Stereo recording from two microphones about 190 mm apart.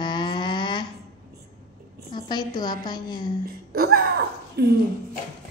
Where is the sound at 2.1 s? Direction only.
25° left (ahead or behind).